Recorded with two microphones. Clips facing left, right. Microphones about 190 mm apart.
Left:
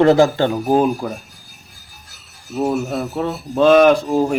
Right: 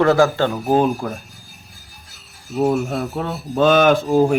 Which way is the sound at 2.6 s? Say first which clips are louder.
Right 1 dB; centre (ahead or behind).